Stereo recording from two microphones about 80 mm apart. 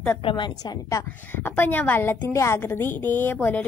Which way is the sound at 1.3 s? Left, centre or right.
Left.